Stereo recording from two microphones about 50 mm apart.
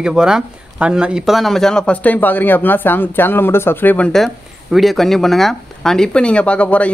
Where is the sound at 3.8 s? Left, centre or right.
Left.